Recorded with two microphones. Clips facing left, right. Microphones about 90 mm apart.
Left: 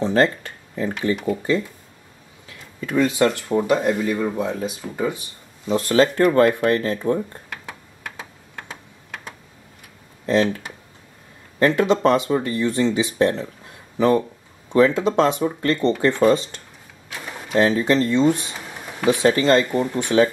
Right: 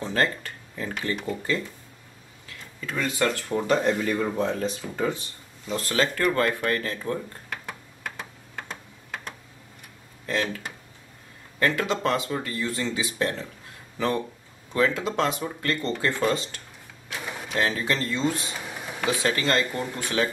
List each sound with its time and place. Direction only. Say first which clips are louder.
0.0 s speech: left 7 dB; 25° left (ahead or behind)
2.9 s speech: left 7 dB; 20° left (ahead or behind)
7.4 s computer keyboard: left 1 dB; centre (ahead or behind)
10.2 s speech: left 9 dB; 25° left (ahead or behind)
11.6 s speech: left 8 dB; 25° left (ahead or behind)
17.1 s a sound: left 2 dB; 10° left (ahead or behind)
17.6 s speech: left 9 dB; 25° left (ahead or behind)